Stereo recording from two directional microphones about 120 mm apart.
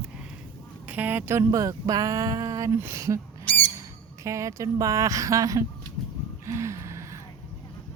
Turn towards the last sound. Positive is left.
turn(degrees=-25)  # may be behind; listen again after turning